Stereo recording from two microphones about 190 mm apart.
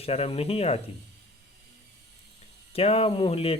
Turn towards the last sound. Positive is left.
turn(degrees=30)  # may be behind; listen again after turning